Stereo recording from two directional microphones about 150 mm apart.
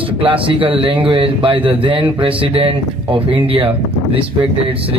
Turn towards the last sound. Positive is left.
turn(degrees=-40)  # may be behind; listen again after turning